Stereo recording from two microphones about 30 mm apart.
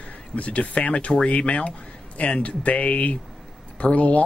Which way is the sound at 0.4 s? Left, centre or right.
Left.